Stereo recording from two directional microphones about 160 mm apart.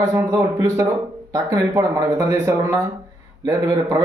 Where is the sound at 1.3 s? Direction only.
20° right (ahead or behind).